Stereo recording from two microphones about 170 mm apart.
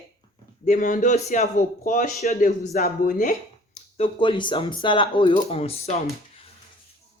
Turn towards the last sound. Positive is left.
turn(degrees=35)  # may be behind; listen again after turning